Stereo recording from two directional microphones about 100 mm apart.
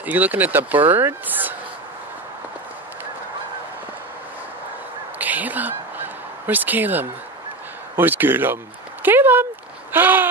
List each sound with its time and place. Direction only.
0.0 s speech: 15° right (ahead or behind)
5.2 s fowl: 15° right (ahead or behind)
7.9 s a man's voice: 20° right (ahead or behind)
9.9 s a sound: 20° right (ahead or behind)